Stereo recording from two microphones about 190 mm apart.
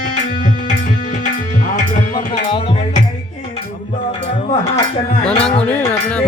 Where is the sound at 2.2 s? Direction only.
25° left (ahead or behind).